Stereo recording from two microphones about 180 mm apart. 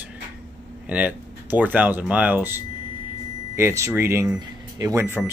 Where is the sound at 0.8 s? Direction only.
10° right (ahead or behind).